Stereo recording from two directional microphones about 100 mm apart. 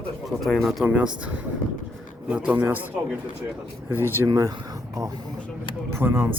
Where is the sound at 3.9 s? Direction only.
20° right (ahead or behind).